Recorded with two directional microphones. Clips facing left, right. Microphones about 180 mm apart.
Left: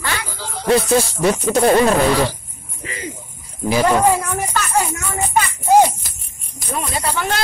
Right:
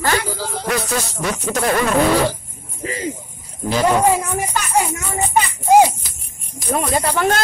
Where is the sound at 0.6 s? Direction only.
30° left (ahead or behind).